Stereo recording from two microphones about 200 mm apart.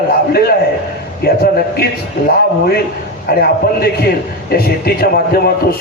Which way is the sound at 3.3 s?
50° left (ahead or behind).